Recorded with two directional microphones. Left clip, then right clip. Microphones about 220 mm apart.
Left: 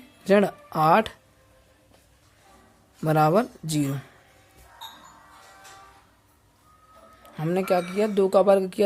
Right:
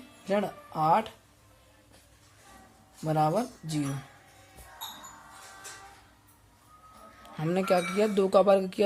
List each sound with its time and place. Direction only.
0.3 s speech: 45° left (ahead or behind)
3.0 s speech: 40° left (ahead or behind)
7.3 s speech: 15° left (ahead or behind)